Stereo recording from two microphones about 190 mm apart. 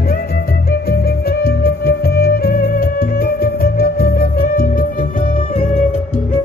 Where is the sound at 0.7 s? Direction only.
55° left (ahead or behind).